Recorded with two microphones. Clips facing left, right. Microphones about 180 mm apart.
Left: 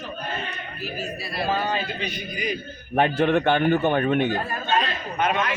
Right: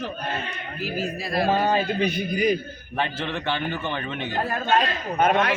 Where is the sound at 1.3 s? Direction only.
45° right (ahead or behind).